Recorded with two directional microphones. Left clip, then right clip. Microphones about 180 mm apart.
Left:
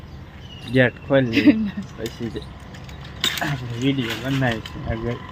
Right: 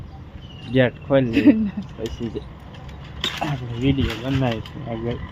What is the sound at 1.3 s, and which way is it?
Speech, 50° right (ahead or behind).